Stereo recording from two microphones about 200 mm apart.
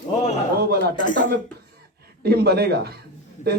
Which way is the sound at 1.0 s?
40° left (ahead or behind).